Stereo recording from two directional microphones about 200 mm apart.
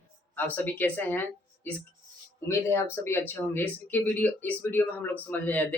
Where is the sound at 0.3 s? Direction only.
10° left (ahead or behind).